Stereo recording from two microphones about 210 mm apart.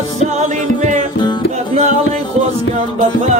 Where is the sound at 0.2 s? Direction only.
35° right (ahead or behind).